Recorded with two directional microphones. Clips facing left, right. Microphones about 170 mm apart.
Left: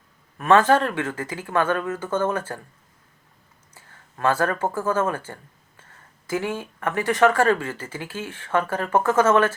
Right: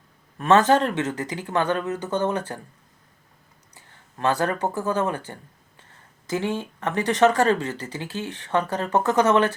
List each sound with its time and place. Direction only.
0.3 s speech: 25° right (ahead or behind)
3.8 s speech: 20° right (ahead or behind)